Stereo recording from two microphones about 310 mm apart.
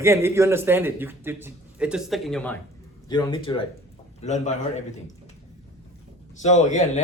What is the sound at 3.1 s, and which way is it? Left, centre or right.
A man's voice, centre.